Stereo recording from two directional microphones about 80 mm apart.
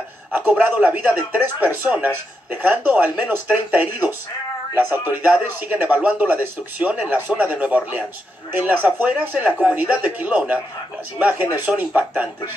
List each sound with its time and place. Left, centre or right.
0.3 s a man's voice: right
5.2 s a man's voice: centre